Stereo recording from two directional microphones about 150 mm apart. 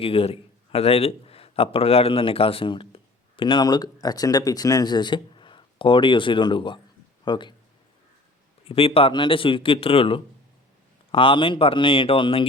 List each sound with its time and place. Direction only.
0.0 s a man's voice: 40° left (ahead or behind)
8.6 s speech: 40° left (ahead or behind)